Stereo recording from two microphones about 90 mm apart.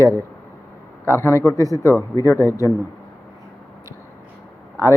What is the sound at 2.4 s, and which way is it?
Speech, 30° right (ahead or behind).